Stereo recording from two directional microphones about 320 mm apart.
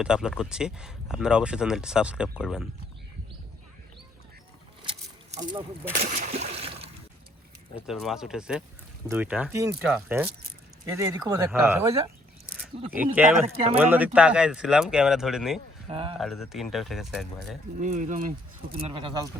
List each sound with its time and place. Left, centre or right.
0.0 s speech: centre
4.8 s a sound: centre
6.0 s water: right
7.9 s speech: centre
13.1 s speech: centre
15.9 s speech: centre
16.1 s speech: centre
17.7 s speech: right